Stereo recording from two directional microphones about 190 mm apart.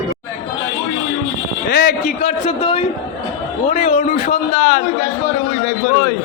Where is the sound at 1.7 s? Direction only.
60° left (ahead or behind).